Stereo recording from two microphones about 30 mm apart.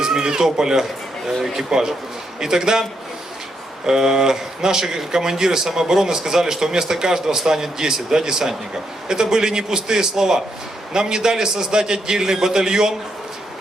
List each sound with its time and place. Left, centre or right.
0.0 s speech: right
3.8 s speech: right